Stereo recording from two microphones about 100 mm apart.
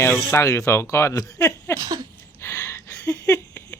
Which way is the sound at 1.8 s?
40° right (ahead or behind).